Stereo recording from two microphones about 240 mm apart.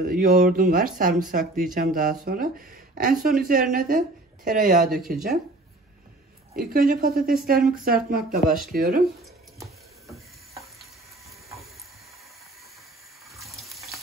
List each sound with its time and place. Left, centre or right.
0.1 s speech: right
6.5 s speech: right
13.4 s water: centre